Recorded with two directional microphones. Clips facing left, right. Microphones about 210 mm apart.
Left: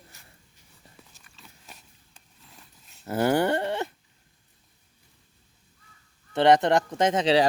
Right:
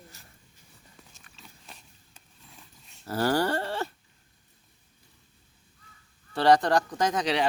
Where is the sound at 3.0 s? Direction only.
20° left (ahead or behind).